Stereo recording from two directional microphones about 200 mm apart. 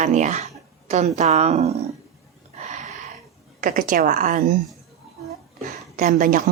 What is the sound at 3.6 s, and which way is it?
Speech, 45° right (ahead or behind).